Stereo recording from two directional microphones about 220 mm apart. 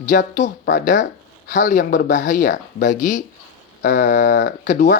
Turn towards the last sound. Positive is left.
turn(degrees=35)  # may be behind; listen again after turning